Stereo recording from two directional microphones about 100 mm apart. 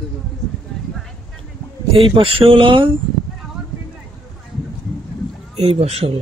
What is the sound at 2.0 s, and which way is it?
Speech, 60° right (ahead or behind).